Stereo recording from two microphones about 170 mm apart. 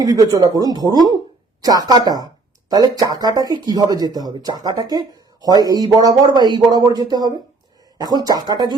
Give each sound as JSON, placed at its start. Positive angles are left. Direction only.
{"t": 0.0, "sound": "speech", "side_deg": -20}